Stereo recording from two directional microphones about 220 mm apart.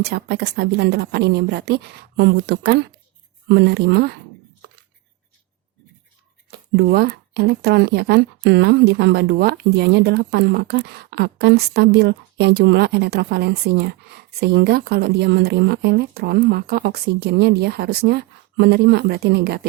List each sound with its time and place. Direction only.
0.0 s speech: 50° right (ahead or behind)
6.7 s speech: 45° right (ahead or behind)